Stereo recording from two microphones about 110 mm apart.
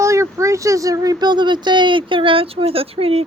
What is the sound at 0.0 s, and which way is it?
Speech, 25° right (ahead or behind).